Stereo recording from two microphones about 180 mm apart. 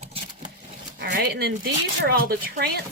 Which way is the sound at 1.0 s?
65° right (ahead or behind).